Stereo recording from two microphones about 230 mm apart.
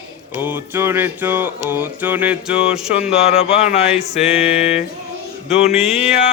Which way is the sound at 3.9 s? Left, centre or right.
Centre.